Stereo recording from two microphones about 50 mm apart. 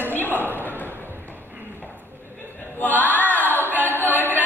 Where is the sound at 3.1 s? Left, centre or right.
Left.